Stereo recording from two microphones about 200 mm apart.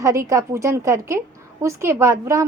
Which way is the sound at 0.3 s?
15° right (ahead or behind).